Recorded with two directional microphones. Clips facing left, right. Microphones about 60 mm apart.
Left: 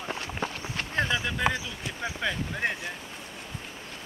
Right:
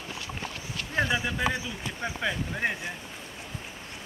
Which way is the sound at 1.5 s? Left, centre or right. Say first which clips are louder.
Even; centre.